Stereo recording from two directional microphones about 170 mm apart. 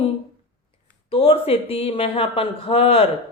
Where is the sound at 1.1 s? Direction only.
35° left (ahead or behind).